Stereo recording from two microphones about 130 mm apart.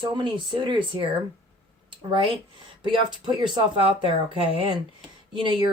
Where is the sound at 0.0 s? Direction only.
35° right (ahead or behind).